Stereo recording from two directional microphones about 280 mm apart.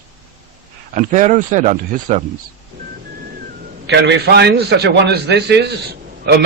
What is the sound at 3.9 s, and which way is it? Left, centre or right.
A man's voice, right.